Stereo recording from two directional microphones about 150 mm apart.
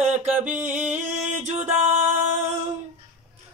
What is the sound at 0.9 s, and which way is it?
Music, 50° right (ahead or behind).